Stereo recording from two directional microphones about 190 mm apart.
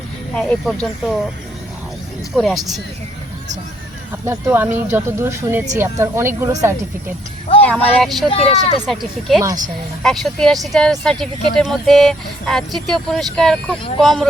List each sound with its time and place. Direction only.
0.3 s speech: 5° left (ahead or behind)
2.3 s speech: centre (ahead or behind)
4.3 s speech: 10° right (ahead or behind)
7.6 s speech: 10° left (ahead or behind)
8.3 s speech: 30° left (ahead or behind)
8.9 s speech: centre (ahead or behind)